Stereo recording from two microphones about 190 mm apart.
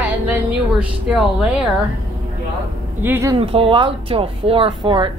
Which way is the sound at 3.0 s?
15° right (ahead or behind).